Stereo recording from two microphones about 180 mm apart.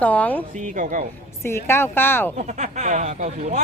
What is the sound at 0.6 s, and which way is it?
Speech, 45° right (ahead or behind).